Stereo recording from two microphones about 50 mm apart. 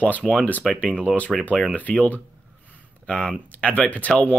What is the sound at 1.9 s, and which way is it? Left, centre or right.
Speech, left.